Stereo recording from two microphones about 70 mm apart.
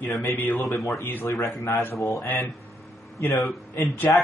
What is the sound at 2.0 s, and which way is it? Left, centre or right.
Speech, left.